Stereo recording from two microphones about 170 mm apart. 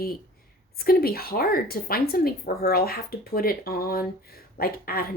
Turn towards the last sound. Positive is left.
turn(degrees=60)  # may be behind; listen again after turning